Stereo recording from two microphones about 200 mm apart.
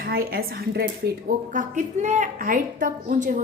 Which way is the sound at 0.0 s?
50° right (ahead or behind).